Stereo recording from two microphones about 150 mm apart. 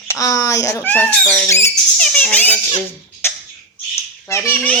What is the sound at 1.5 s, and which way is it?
A child's voice, 15° left (ahead or behind).